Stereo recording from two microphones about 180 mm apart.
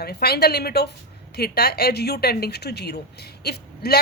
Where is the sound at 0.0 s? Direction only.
60° left (ahead or behind).